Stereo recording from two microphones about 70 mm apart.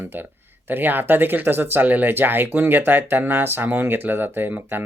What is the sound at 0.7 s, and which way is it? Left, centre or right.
Speech, right.